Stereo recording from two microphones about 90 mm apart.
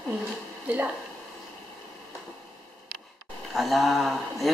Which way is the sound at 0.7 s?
20° right (ahead or behind).